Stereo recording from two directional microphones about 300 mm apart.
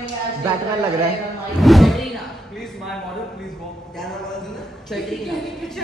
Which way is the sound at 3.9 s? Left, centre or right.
Centre.